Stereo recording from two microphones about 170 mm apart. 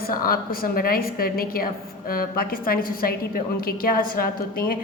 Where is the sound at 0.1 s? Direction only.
60° left (ahead or behind).